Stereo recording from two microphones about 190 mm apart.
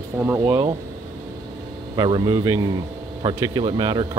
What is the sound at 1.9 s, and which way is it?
Speech, 20° right (ahead or behind).